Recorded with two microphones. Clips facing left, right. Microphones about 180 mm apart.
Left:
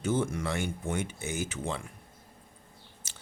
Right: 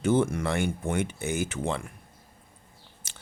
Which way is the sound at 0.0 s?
60° right (ahead or behind).